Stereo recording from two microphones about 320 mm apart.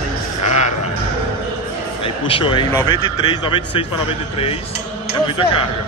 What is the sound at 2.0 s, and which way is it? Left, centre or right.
Speech, centre.